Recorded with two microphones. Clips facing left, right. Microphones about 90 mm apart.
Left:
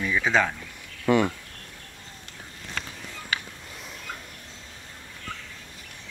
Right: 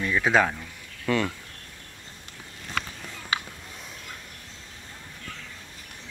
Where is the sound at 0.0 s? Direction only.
Centre (ahead or behind).